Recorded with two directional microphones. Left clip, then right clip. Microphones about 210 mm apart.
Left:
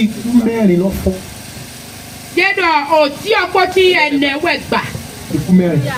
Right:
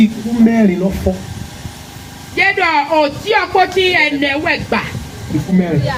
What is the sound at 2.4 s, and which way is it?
A woman's voice, 50° left (ahead or behind).